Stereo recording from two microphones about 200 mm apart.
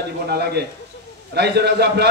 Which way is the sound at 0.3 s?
55° right (ahead or behind).